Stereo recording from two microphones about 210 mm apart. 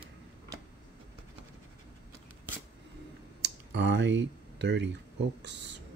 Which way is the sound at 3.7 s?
60° right (ahead or behind).